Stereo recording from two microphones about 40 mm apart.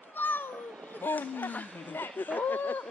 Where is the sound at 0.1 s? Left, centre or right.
Left.